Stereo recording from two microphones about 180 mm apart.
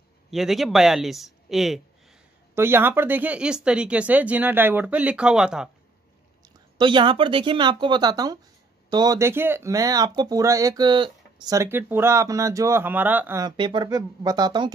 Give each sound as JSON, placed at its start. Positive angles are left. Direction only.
{"t": 0.3, "sound": "speech", "side_deg": 0}
{"t": 2.5, "sound": "speech", "side_deg": -10}
{"t": 6.8, "sound": "speech", "side_deg": -25}
{"t": 13.4, "sound": "speech", "side_deg": -25}